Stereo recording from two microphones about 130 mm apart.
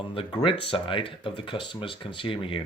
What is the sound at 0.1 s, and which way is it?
Speech, 40° left (ahead or behind).